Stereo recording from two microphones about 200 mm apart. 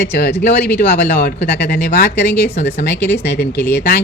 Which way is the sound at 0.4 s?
60° left (ahead or behind).